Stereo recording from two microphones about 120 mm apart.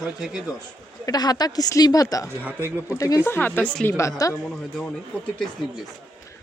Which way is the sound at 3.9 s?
25° left (ahead or behind).